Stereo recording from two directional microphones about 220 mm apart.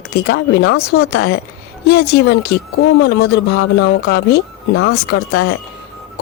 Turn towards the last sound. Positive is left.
turn(degrees=50)  # may be behind; listen again after turning